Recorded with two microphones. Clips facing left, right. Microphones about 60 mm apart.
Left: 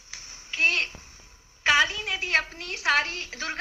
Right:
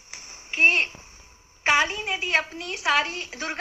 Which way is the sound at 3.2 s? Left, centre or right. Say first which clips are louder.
Right 2 dB; right.